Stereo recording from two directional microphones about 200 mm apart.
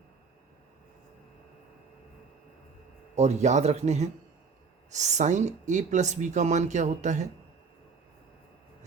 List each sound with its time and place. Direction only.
3.2 s speech: 35° right (ahead or behind)